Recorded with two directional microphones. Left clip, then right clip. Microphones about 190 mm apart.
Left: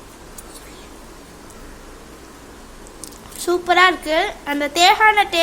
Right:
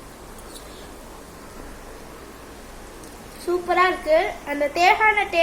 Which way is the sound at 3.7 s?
50° left (ahead or behind).